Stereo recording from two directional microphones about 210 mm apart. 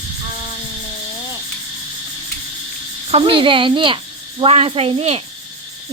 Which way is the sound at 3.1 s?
25° right (ahead or behind).